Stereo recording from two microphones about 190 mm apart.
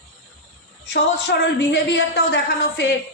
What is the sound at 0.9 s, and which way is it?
A man's voice, 60° left (ahead or behind).